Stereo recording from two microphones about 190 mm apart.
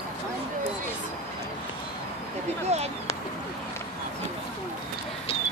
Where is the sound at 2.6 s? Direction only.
35° right (ahead or behind).